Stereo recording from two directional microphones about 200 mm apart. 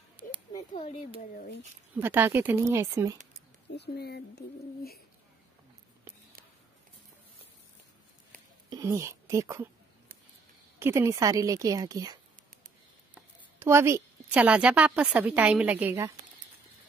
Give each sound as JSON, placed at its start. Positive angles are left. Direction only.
{"t": 0.5, "sound": "speech", "side_deg": 20}
{"t": 2.0, "sound": "a woman's voice", "side_deg": -10}
{"t": 3.7, "sound": "speech", "side_deg": 55}
{"t": 8.6, "sound": "speech", "side_deg": -15}
{"t": 10.8, "sound": "a woman's voice", "side_deg": -15}